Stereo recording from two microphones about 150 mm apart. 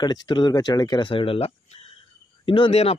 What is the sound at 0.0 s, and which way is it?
Speech, 30° left (ahead or behind).